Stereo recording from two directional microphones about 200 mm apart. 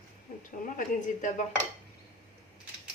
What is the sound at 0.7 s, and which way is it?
Speech, 40° left (ahead or behind).